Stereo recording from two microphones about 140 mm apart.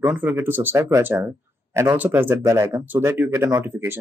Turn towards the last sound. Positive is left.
turn(degrees=-15)  # may be behind; listen again after turning